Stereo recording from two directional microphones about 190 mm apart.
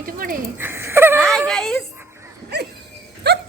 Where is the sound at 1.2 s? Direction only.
Centre (ahead or behind).